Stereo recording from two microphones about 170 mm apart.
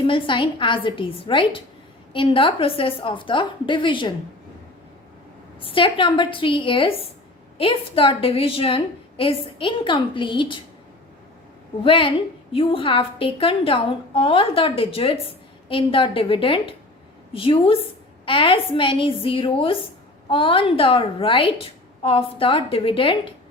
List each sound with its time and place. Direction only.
0.1 s a woman's voice: 30° left (ahead or behind)
5.5 s a woman's voice: 30° left (ahead or behind)
11.8 s a woman's voice: 30° left (ahead or behind)